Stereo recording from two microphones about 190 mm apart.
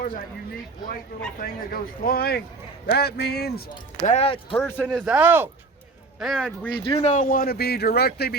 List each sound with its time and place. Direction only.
1.4 s speech: 50° left (ahead or behind)
4.0 s speech: 35° left (ahead or behind)
4.5 s speech: 10° left (ahead or behind)
5.0 s speech: 10° right (ahead or behind)
6.8 s speech: 35° left (ahead or behind); by 8.4 s 55° left (ahead or behind)